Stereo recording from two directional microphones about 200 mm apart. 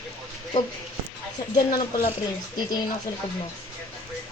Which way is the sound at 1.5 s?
25° left (ahead or behind).